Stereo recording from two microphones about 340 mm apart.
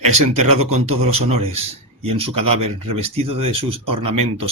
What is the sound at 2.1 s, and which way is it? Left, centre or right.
Speech, centre.